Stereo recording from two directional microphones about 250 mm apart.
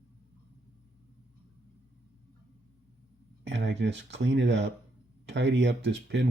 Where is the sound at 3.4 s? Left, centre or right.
Right.